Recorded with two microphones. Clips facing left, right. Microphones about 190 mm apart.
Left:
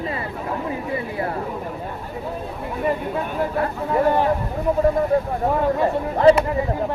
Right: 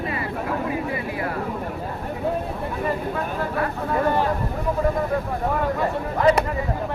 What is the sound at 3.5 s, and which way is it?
Speech, 20° left (ahead or behind).